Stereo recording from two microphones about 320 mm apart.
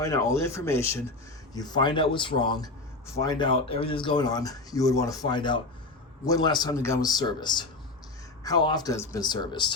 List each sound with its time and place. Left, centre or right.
0.0 s speech: centre